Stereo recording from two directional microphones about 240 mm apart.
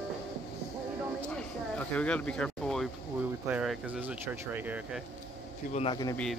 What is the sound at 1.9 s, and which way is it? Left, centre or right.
Speech, centre.